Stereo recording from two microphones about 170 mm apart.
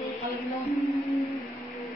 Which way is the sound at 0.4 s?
Centre (ahead or behind).